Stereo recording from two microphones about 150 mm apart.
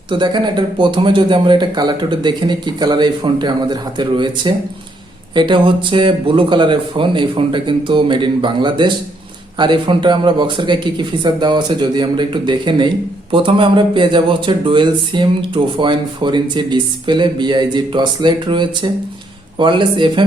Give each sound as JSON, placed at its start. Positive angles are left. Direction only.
{"t": 0.1, "sound": "speech", "side_deg": -30}